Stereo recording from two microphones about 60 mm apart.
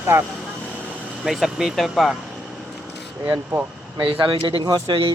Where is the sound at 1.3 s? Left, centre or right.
Centre.